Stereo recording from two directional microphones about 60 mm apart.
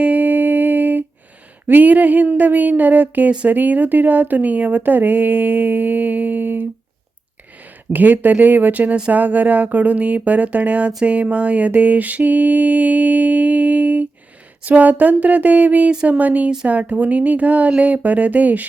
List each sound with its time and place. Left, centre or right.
0.0 s music: right
1.6 s speech: right